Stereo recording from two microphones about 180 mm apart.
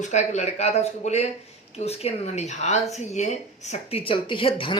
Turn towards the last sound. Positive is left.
turn(degrees=30)  # may be behind; listen again after turning